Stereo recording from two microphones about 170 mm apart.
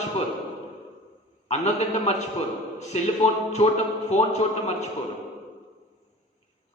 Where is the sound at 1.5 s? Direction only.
40° left (ahead or behind).